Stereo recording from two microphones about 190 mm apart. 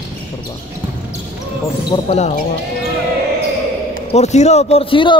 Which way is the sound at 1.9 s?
35° left (ahead or behind).